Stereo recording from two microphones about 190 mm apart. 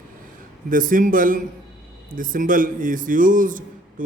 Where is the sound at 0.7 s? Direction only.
45° right (ahead or behind).